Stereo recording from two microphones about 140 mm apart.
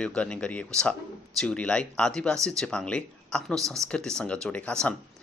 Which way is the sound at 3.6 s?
20° right (ahead or behind).